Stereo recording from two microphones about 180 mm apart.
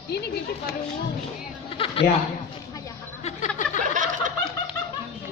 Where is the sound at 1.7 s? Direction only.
30° left (ahead or behind).